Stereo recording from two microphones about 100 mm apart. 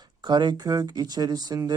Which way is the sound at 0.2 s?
50° right (ahead or behind).